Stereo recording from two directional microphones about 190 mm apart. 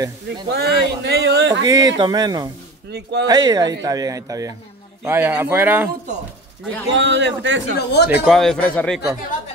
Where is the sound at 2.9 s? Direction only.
60° right (ahead or behind).